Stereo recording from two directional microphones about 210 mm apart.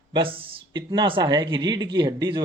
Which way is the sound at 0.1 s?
25° right (ahead or behind).